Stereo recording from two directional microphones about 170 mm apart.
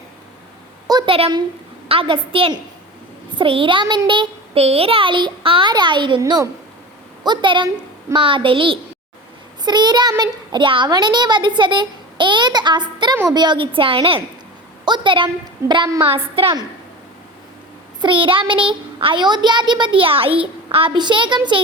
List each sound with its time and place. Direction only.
0.9 s a woman's voice: 25° right (ahead or behind)
18.0 s a child's voice: 30° right (ahead or behind)